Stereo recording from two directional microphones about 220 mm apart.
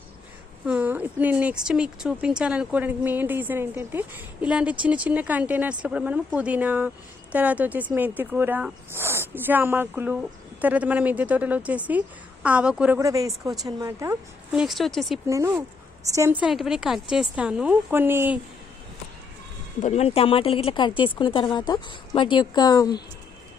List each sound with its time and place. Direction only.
0.7 s a woman's voice: 5° right (ahead or behind)
14.6 s a woman's voice: centre (ahead or behind)
15.3 s a woman's voice: 15° right (ahead or behind)
19.8 s speech: 30° left (ahead or behind)